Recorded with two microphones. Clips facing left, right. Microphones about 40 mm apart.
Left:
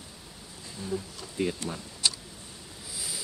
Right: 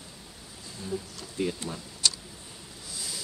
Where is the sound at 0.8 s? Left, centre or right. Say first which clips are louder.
Left 1 dB; centre.